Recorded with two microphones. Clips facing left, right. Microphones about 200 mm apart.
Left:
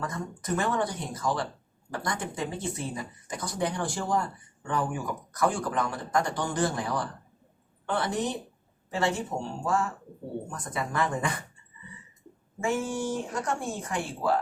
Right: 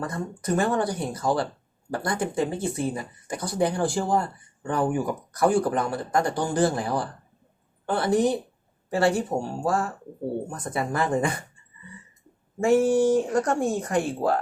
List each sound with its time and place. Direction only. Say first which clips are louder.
0.0 s speech: right 4 dB; 30° right (ahead or behind)
12.5 s speech: right 10 dB; 40° right (ahead or behind)